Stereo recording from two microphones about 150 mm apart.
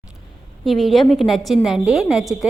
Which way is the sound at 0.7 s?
Centre (ahead or behind).